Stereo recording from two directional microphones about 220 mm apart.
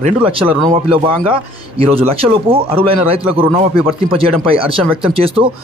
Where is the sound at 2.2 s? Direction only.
25° right (ahead or behind).